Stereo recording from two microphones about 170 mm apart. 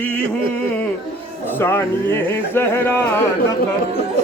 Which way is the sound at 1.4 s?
10° left (ahead or behind).